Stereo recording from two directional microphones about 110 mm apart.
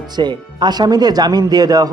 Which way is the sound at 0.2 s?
40° right (ahead or behind).